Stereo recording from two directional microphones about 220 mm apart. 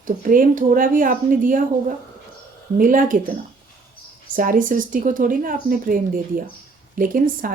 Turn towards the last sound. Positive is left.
turn(degrees=-40)  # may be behind; listen again after turning